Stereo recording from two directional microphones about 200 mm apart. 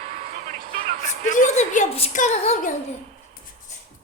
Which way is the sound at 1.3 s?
40° left (ahead or behind).